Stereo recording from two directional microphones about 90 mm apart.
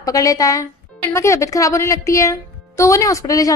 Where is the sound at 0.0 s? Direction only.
40° left (ahead or behind).